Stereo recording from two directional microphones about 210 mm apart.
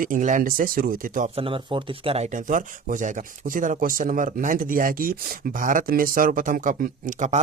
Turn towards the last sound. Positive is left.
turn(degrees=-35)  # may be behind; listen again after turning